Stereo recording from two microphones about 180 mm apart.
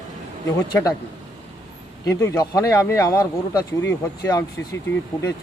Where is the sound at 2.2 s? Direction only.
15° left (ahead or behind).